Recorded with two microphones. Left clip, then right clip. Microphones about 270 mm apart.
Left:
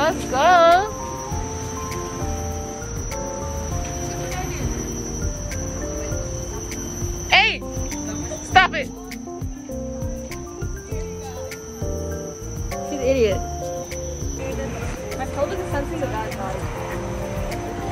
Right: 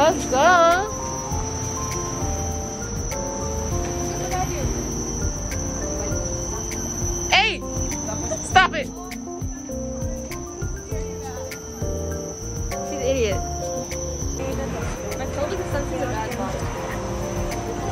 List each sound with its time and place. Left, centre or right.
0.0 s a sound: centre
7.2 s music: centre
8.5 s music: centre
13.1 s music: centre